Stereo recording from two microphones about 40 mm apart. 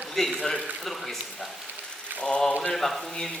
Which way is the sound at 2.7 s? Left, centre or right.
Centre.